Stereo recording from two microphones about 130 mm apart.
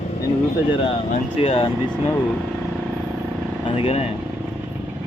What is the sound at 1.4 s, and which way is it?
Speech, 45° left (ahead or behind).